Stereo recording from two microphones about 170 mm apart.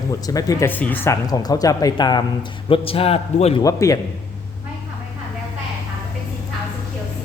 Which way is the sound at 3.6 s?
20° left (ahead or behind).